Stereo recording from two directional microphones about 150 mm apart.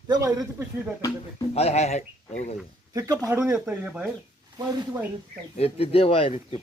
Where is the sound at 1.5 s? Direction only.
45° left (ahead or behind).